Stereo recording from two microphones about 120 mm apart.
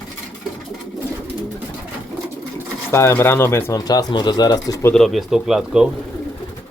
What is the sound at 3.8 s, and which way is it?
Speech, 30° left (ahead or behind).